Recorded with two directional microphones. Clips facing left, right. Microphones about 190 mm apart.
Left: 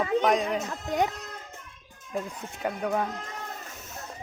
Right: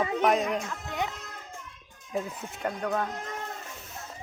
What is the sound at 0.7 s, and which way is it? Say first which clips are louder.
Speech: left 6 dB; 40° left (ahead or behind).